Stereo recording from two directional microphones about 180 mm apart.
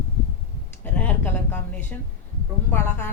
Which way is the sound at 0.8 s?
10° left (ahead or behind).